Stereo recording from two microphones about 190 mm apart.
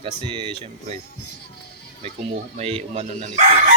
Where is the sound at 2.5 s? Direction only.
35° right (ahead or behind).